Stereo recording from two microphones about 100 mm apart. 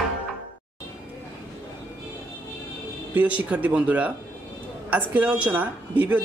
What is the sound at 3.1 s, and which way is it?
Speech, 15° right (ahead or behind).